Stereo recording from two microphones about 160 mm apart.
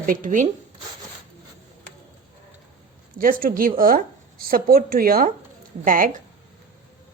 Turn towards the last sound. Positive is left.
turn(degrees=-55)  # may be behind; listen again after turning